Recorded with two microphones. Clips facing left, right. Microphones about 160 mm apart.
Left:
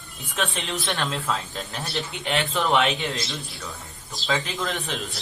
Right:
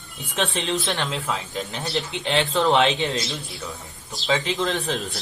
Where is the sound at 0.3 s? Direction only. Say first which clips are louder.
Right 4 dB; 25° right (ahead or behind).